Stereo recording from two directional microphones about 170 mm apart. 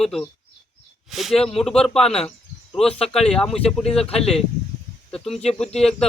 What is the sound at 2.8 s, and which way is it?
Speech, 35° left (ahead or behind).